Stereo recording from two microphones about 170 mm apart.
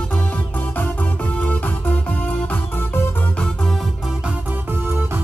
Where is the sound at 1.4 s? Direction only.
10° left (ahead or behind).